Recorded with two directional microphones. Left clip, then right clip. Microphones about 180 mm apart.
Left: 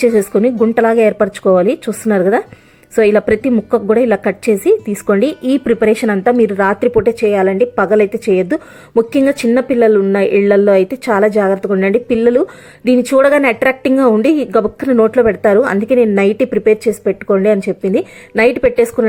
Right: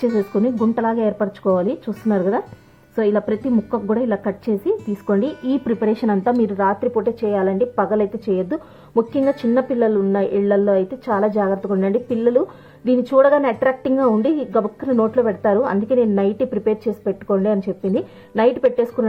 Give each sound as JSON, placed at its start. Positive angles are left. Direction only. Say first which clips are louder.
{"t": 0.2, "sound": "a woman's voice", "louder": "left 8 dB", "side_deg": 20}
{"t": 14.5, "sound": "a woman's voice", "louder": "left 6 dB", "side_deg": 30}
{"t": 14.9, "sound": "speech", "louder": "left 7 dB", "side_deg": 20}